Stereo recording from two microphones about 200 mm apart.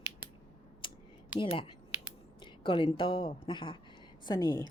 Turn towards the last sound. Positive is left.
turn(degrees=20)  # may be behind; listen again after turning